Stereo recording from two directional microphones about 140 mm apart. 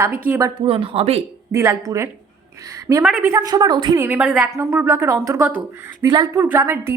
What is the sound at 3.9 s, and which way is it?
Speech, 15° right (ahead or behind).